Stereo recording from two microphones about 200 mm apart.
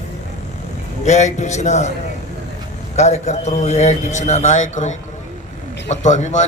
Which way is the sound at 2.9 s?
35° left (ahead or behind).